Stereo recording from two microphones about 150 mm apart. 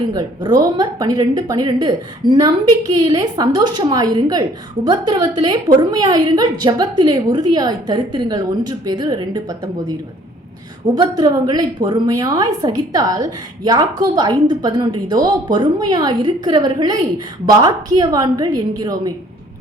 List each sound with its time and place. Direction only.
0.1 s a woman's voice: 25° right (ahead or behind)
10.9 s a woman's voice: 30° right (ahead or behind)